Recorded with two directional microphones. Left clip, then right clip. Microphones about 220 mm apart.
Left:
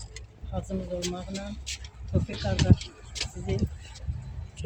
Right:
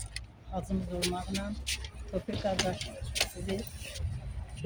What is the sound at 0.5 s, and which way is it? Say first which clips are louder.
Speech: left 3 dB; 15° right (ahead or behind).